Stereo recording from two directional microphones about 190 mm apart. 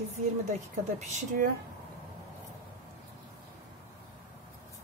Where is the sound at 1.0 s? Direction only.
40° right (ahead or behind).